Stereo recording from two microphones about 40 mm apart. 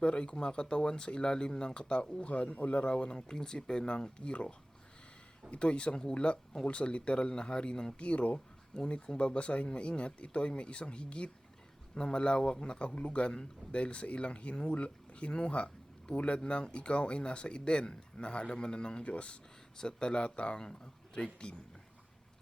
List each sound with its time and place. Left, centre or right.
0.0 s speech: left
19.8 s a man's voice: centre